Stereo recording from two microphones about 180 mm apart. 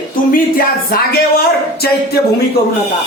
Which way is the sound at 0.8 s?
55° left (ahead or behind).